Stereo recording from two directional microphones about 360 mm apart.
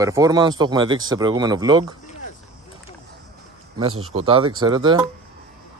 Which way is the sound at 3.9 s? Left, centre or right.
Right.